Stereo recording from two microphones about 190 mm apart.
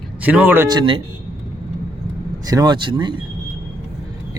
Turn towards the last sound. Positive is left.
turn(degrees=-25)  # may be behind; listen again after turning